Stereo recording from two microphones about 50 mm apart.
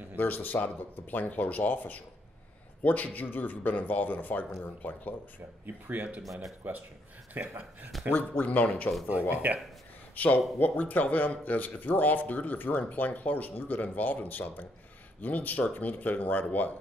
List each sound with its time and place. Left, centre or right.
0.2 s speech: left
5.9 s speech: right
7.3 s speech: right
8.1 s speech: left
9.3 s speech: right
10.1 s speech: left